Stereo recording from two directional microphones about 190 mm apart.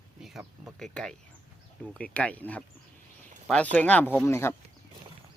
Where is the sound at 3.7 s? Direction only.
10° left (ahead or behind).